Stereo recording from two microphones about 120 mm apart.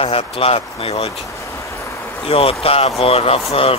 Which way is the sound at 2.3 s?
55° left (ahead or behind).